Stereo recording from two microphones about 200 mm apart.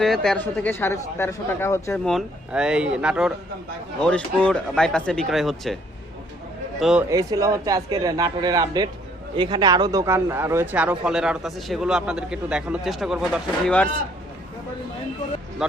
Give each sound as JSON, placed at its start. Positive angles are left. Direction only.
{"t": 0.0, "sound": "speech", "side_deg": 0}
{"t": 2.1, "sound": "a man's voice", "side_deg": -5}
{"t": 6.7, "sound": "a man's voice", "side_deg": 0}
{"t": 7.1, "sound": "a man's voice", "side_deg": -15}